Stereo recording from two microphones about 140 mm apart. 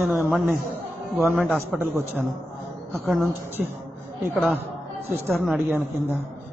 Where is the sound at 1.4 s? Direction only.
5° left (ahead or behind).